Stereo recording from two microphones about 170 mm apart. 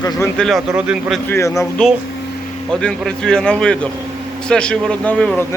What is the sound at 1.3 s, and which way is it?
Speech, 15° left (ahead or behind).